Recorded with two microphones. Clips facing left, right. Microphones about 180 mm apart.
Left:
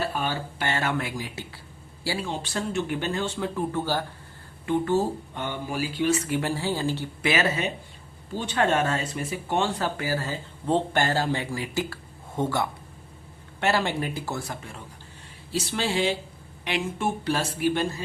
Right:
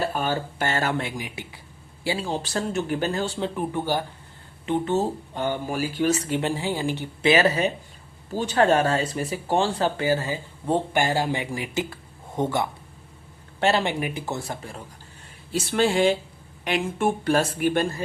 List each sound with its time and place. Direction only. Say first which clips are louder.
0.1 s speech: right 3 dB; 45° right (ahead or behind)
0.9 s speech: right 1 dB; 20° right (ahead or behind)
2.2 s speech: right 3 dB; 40° right (ahead or behind)
3.4 s speech: right 1 dB; 15° right (ahead or behind)
5.3 s speech: right 4 dB; 40° right (ahead or behind)
6.2 s speech: right 1 dB; 25° right (ahead or behind)
7.3 s speech: right 5 dB; 35° right (ahead or behind)
10.2 s speech: right 2 dB; 15° right (ahead or behind); by 14.8 s 35° right (ahead or behind)
15.5 s speech: right 5 dB; 50° right (ahead or behind)